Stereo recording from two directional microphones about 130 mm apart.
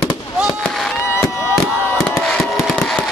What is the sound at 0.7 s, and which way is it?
Fireworks, 5° left (ahead or behind).